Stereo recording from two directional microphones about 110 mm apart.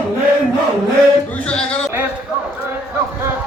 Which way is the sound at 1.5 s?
10° left (ahead or behind).